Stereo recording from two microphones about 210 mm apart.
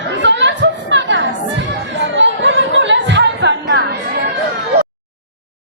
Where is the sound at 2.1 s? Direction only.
60° right (ahead or behind).